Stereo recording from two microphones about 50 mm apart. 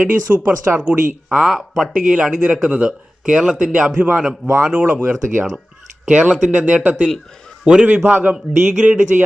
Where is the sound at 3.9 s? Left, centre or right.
Right.